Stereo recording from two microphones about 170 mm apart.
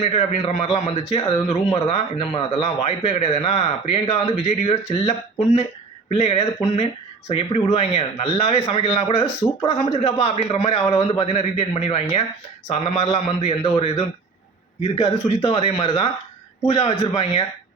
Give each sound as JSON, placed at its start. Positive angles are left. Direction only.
{"t": 0.0, "sound": "a man's voice", "side_deg": 35}